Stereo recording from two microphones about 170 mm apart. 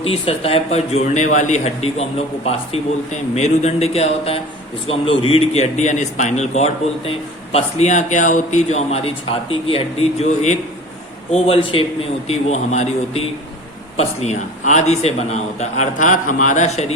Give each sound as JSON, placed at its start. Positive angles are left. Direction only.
{"t": 0.0, "sound": "a man's voice", "side_deg": 35}